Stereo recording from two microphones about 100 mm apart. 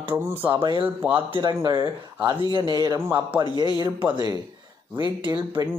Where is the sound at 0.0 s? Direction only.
20° right (ahead or behind).